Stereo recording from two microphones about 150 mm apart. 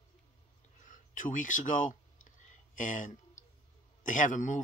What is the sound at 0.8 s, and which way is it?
Speech, 60° left (ahead or behind).